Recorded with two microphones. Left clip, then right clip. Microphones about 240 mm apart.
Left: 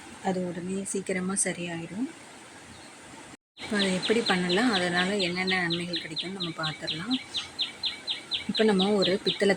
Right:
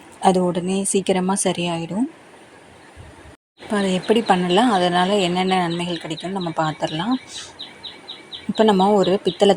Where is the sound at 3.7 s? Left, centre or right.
Right.